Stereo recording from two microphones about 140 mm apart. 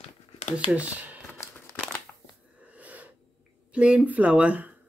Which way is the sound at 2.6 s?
10° right (ahead or behind).